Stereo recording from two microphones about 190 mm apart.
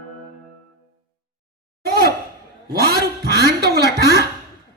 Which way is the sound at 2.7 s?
55° right (ahead or behind).